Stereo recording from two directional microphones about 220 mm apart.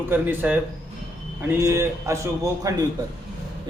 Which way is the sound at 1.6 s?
15° right (ahead or behind).